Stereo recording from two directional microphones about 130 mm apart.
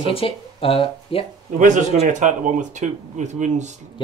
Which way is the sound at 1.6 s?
75° right (ahead or behind).